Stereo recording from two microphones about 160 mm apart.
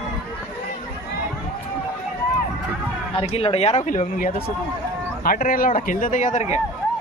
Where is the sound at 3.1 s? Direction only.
35° left (ahead or behind).